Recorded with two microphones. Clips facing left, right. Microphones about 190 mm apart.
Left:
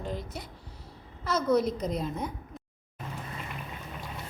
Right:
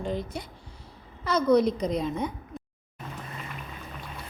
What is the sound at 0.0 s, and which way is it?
A woman's voice, centre (ahead or behind).